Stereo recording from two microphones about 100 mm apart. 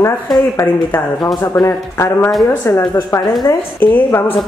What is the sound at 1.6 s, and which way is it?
A woman's voice, 30° left (ahead or behind).